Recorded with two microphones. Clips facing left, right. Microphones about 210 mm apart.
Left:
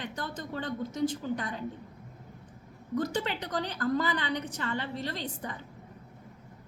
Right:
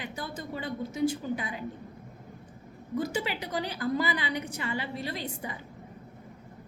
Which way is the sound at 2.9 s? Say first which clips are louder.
Even; 10° right (ahead or behind).